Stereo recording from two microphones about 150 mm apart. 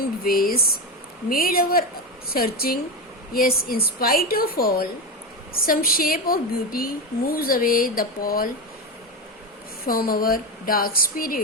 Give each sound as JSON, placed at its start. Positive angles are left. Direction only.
{"t": 0.3, "sound": "a woman's voice", "side_deg": 80}
{"t": 2.2, "sound": "a woman's voice", "side_deg": 90}
{"t": 3.3, "sound": "a woman's voice", "side_deg": 75}
{"t": 5.5, "sound": "a woman's voice", "side_deg": 75}
{"t": 9.8, "sound": "a woman's voice", "side_deg": 80}